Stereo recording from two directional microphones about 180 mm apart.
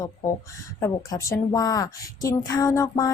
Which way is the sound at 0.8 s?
15° left (ahead or behind).